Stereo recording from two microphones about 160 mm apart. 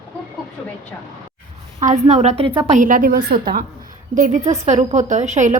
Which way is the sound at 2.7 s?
55° right (ahead or behind).